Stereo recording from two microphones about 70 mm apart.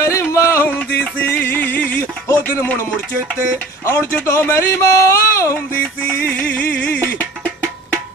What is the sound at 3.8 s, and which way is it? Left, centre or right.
Speech, left.